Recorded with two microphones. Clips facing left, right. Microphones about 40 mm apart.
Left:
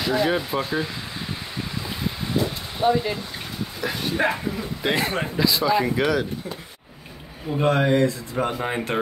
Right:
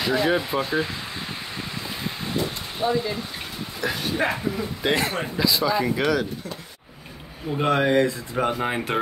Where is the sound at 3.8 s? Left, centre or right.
Centre.